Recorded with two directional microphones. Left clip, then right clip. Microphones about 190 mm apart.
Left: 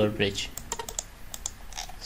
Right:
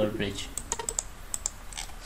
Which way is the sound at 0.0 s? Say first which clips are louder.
Left 3 dB; 50° left (ahead or behind).